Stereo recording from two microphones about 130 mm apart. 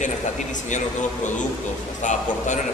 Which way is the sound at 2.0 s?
70° left (ahead or behind).